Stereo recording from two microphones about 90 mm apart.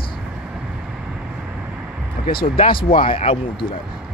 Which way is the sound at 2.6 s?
80° left.